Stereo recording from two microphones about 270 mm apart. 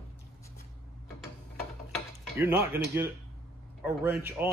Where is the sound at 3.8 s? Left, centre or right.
Centre.